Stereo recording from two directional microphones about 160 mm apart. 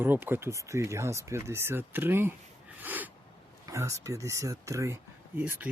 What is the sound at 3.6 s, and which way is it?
Speech, 20° right (ahead or behind).